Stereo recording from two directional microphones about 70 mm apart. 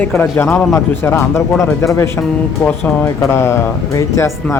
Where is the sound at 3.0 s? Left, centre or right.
Left.